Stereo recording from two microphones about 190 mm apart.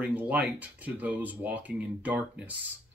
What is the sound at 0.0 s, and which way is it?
Speech, 10° right (ahead or behind).